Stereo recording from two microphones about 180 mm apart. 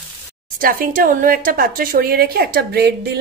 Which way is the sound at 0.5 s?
55° right (ahead or behind).